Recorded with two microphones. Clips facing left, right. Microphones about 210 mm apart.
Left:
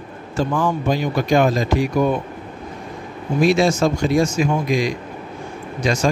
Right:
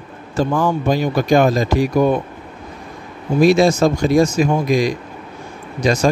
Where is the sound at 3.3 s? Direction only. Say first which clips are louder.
Right 4 dB; 40° right (ahead or behind).